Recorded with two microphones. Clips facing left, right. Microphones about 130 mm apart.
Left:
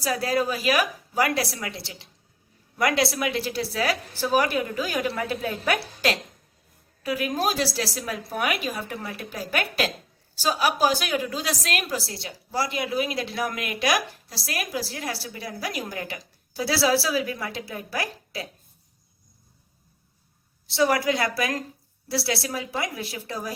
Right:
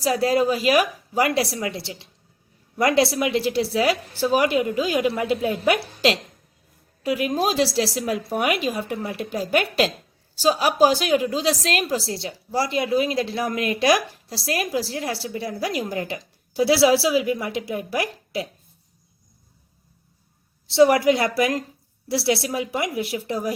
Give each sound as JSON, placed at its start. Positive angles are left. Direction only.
{"t": 0.0, "sound": "a woman's voice", "side_deg": -25}
{"t": 20.7, "sound": "a woman's voice", "side_deg": -25}